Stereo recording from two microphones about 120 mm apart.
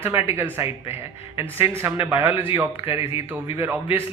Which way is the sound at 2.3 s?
45° left (ahead or behind).